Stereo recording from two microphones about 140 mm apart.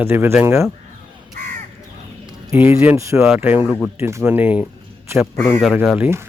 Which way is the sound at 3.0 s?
20° right (ahead or behind).